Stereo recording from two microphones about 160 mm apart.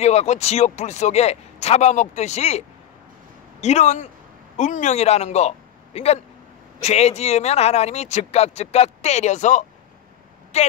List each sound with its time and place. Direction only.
0.0 s speech: 45° left (ahead or behind)
3.6 s speech: 45° left (ahead or behind)